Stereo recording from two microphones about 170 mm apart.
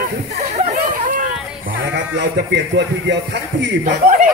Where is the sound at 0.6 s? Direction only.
50° right (ahead or behind).